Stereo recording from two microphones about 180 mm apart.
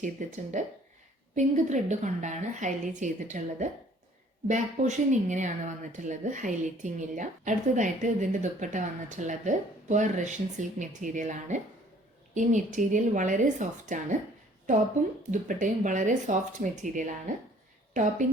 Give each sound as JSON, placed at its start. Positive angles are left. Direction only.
{"t": 0.0, "sound": "speech", "side_deg": -45}